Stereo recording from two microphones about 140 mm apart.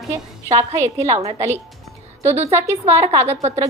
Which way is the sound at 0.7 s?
50° right (ahead or behind).